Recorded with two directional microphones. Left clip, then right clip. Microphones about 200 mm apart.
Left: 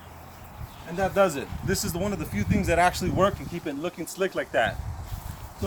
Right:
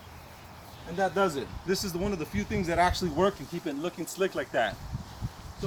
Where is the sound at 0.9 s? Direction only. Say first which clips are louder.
Left 4 dB; 25° left (ahead or behind).